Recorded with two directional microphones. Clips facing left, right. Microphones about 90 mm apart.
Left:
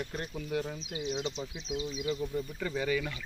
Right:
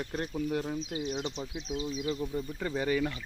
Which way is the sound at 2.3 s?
20° right (ahead or behind).